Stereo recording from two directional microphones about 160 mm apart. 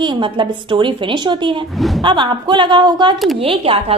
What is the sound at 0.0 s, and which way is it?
A woman's voice, 30° right (ahead or behind).